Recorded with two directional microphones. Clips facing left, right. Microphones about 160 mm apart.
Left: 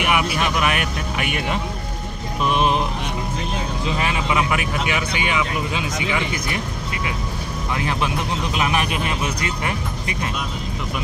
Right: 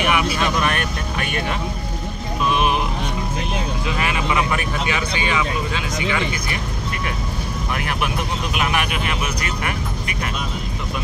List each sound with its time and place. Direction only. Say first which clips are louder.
0.0 s vehicle: right 1 dB; 15° left (ahead or behind)
4.0 s speech: right 1 dB; 20° left (ahead or behind)
7.7 s speech: left 2 dB; 20° left (ahead or behind)